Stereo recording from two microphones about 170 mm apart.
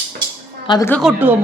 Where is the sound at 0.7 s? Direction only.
20° left (ahead or behind).